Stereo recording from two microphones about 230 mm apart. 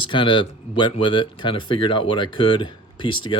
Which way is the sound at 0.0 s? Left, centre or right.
Left.